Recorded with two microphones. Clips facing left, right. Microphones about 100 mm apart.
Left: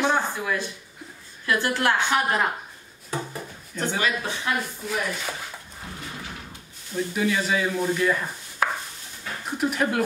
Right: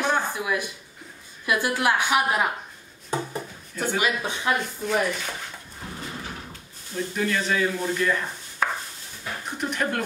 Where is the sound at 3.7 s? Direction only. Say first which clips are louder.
Right 1 dB; 10° right (ahead or behind).